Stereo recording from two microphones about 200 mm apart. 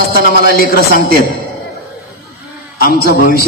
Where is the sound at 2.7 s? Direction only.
50° left (ahead or behind).